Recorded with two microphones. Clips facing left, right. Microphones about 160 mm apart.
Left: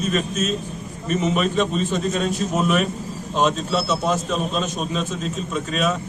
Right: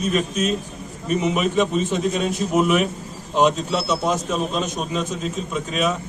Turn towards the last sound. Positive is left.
turn(degrees=-10)  # may be behind; listen again after turning